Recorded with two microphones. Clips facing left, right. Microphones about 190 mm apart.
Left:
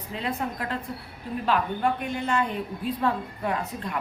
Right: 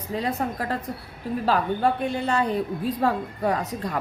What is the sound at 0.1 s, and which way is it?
A woman's voice, 45° right (ahead or behind).